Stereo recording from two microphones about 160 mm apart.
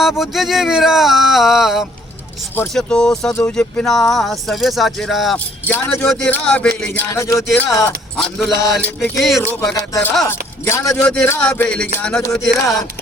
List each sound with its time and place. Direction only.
0.2 s speech: centre (ahead or behind)
5.6 s speech: 15° left (ahead or behind)
7.1 s music: 20° left (ahead or behind)
7.5 s speech: 15° left (ahead or behind)
8.1 s speech: centre (ahead or behind)
9.5 s speech: 10° left (ahead or behind)
9.7 s music: 20° left (ahead or behind)
10.2 s speech: 15° left (ahead or behind)